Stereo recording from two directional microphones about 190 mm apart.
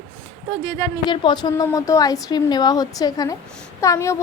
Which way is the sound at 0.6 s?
20° left (ahead or behind).